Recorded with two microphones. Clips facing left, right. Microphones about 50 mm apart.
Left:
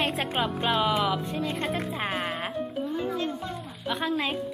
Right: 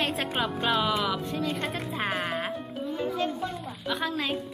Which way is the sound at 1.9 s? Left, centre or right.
Centre.